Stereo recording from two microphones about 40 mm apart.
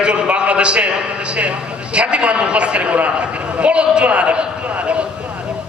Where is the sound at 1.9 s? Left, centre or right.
Right.